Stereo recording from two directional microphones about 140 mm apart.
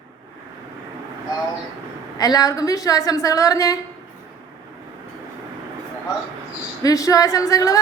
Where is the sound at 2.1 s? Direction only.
25° left (ahead or behind).